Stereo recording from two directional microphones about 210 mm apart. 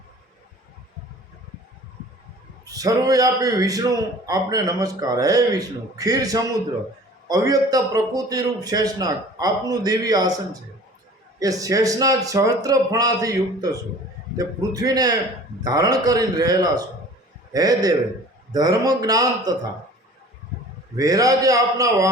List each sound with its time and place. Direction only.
2.6 s a man's voice: 15° right (ahead or behind)
20.9 s a man's voice: 15° right (ahead or behind)